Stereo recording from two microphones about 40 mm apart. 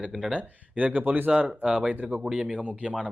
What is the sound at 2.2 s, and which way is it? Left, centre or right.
Speech, centre.